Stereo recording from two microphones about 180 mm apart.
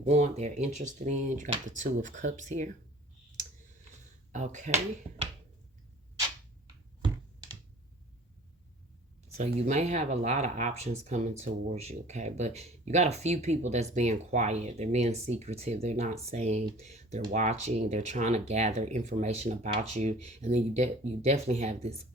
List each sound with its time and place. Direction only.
0.0 s speech: 40° right (ahead or behind)
4.3 s speech: 40° right (ahead or behind)
9.4 s speech: 40° right (ahead or behind)